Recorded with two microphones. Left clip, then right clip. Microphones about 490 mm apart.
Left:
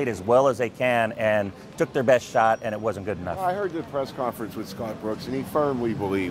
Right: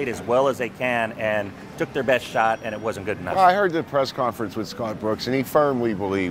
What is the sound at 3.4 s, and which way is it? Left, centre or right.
Speech, right.